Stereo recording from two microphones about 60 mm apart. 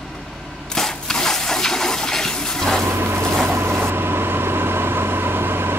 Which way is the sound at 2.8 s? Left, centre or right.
Right.